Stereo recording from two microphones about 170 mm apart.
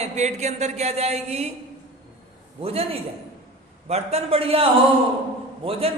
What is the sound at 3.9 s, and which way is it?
A man's voice, 40° right (ahead or behind).